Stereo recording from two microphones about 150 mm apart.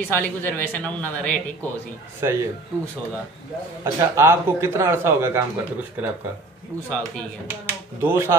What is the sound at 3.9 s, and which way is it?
Speech, 15° right (ahead or behind).